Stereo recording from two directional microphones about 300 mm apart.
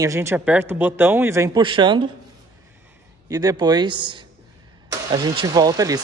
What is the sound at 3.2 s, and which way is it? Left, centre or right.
Speech, centre.